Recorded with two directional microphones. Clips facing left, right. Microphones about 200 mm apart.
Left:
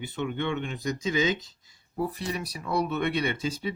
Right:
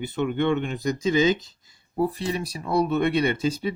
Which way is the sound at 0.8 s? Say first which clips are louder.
Right 6 dB; 35° right (ahead or behind).